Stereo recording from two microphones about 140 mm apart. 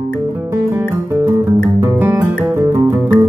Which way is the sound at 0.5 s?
20° right (ahead or behind).